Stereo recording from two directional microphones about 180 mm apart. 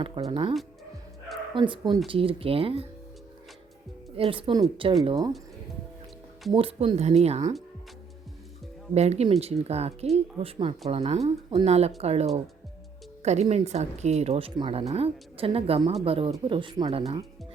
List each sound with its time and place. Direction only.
0.0 s speech: 30° right (ahead or behind)
1.5 s speech: 25° right (ahead or behind)
4.2 s speech: 30° right (ahead or behind)
6.5 s speech: 30° right (ahead or behind)
9.0 s speech: 35° right (ahead or behind)